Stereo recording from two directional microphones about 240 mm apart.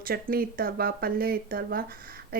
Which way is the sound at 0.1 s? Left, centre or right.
Right.